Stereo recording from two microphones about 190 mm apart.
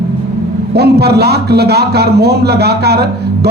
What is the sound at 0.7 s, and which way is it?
A man's voice, 55° right (ahead or behind).